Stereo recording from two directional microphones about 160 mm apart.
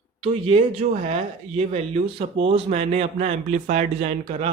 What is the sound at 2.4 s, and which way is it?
Speech, 35° right (ahead or behind).